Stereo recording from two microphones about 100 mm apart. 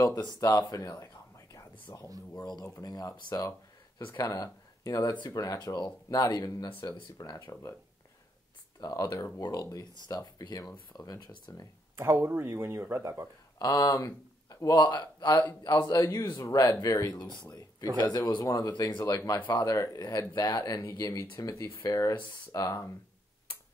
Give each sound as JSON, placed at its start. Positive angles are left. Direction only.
{"t": 0.0, "sound": "speech", "side_deg": 40}
{"t": 2.3, "sound": "speech", "side_deg": 45}
{"t": 8.8, "sound": "speech", "side_deg": 35}
{"t": 12.0, "sound": "speech", "side_deg": -25}
{"t": 13.6, "sound": "speech", "side_deg": 40}
{"t": 14.8, "sound": "speech", "side_deg": 50}
{"t": 18.7, "sound": "speech", "side_deg": 50}